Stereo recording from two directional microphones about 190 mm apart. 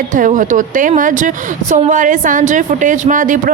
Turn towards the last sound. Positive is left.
turn(degrees=-45)  # may be behind; listen again after turning